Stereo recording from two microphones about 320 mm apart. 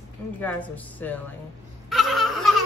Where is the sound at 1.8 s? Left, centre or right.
Centre.